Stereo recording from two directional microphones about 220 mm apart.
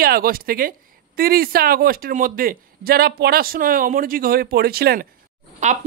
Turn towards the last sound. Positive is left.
turn(degrees=-35)  # may be behind; listen again after turning